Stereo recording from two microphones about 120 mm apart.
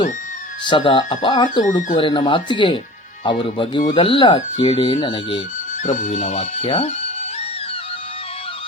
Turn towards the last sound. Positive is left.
turn(degrees=55)  # may be behind; listen again after turning